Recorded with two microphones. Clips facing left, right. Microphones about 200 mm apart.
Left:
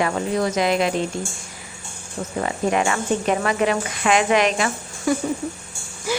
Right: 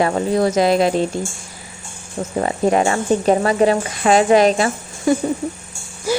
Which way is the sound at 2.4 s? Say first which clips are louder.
Right 5 dB; 35° right (ahead or behind).